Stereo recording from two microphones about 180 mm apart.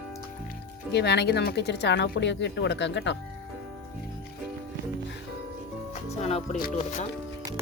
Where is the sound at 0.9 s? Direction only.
70° left (ahead or behind).